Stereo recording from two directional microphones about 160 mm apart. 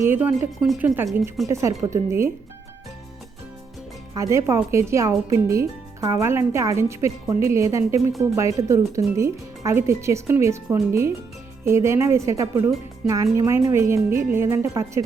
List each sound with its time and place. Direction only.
0.0 s speech: 15° right (ahead or behind); by 1.5 s centre (ahead or behind)
1.8 s speech: 20° right (ahead or behind)
4.1 s speech: 20° right (ahead or behind)